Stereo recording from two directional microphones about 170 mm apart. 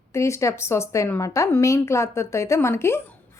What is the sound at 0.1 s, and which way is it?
A woman's voice, 15° left (ahead or behind).